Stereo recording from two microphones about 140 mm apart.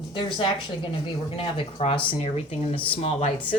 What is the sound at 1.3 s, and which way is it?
Speech, 40° left (ahead or behind).